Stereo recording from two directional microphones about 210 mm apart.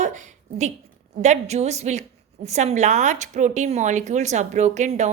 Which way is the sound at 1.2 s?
35° right (ahead or behind).